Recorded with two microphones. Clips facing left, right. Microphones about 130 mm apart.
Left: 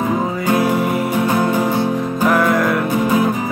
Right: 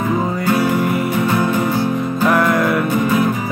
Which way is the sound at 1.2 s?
15° left (ahead or behind).